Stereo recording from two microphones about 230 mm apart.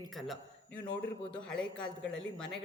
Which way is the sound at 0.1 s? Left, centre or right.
Centre.